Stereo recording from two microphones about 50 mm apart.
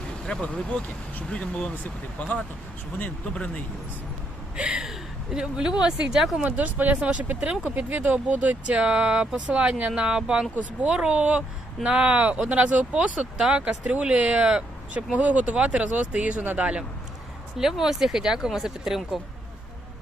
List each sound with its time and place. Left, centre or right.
0.4 s speech: left
4.5 s speech: centre
6.4 s speech: right
17.6 s speech: centre